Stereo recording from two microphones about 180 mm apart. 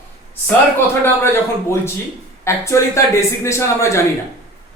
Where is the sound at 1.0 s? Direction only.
15° left (ahead or behind).